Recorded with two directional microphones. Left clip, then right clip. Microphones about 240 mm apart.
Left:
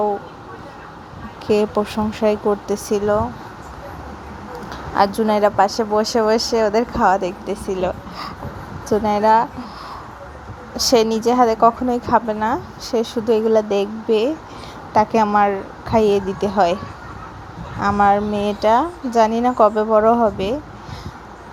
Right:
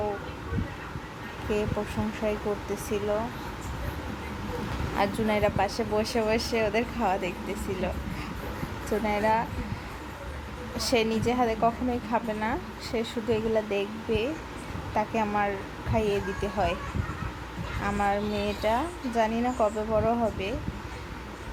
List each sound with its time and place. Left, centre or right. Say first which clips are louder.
1.5 s a woman's voice: left 12 dB; left
4.9 s a woman's voice: left 11 dB; left
10.8 s a woman's voice: left 10 dB; left
17.8 s a woman's voice: left 12 dB; left